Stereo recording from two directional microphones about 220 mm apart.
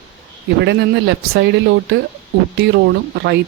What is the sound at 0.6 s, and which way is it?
Speech, 50° right (ahead or behind).